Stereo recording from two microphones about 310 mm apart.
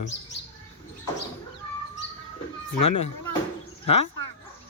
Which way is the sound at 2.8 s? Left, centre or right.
Left.